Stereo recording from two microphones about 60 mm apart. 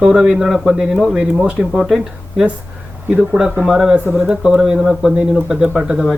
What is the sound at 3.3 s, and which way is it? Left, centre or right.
Speech, centre.